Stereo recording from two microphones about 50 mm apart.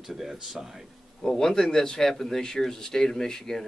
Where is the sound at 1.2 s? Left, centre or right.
Centre.